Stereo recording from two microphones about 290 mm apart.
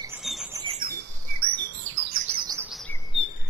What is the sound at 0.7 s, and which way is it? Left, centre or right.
Bird, right.